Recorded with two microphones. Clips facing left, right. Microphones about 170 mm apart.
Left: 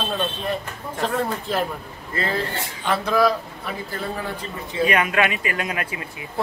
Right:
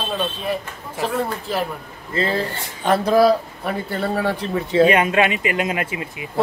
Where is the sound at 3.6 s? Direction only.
65° right (ahead or behind).